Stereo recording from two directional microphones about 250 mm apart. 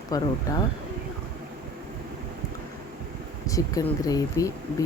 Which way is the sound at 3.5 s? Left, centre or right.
Centre.